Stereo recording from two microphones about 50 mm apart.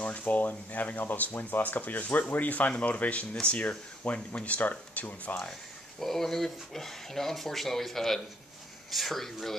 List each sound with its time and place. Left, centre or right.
0.0 s speech: left
5.9 s speech: centre